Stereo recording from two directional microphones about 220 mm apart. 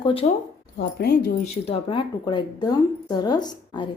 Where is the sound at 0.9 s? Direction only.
45° left (ahead or behind).